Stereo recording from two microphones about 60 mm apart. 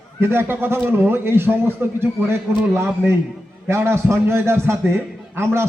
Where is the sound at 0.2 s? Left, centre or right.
Right.